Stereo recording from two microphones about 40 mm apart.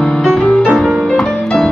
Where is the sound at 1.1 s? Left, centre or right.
Centre.